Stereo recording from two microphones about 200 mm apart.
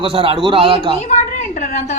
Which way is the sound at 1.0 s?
35° left (ahead or behind).